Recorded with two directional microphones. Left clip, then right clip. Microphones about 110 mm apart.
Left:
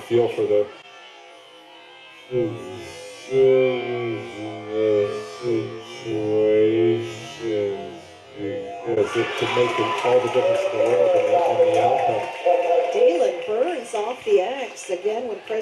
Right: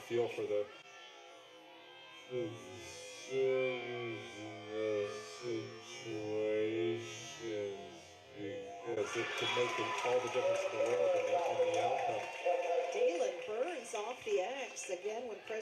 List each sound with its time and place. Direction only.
0.1 s music: 20° left (ahead or behind)
2.7 s music: 15° left (ahead or behind)
6.4 s speech: 25° left (ahead or behind)